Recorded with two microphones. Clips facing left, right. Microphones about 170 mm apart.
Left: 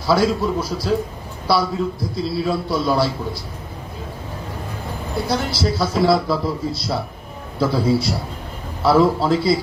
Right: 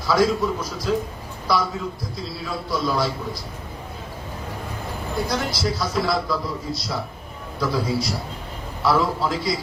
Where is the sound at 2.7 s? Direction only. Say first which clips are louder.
Left 1 dB; 30° left (ahead or behind).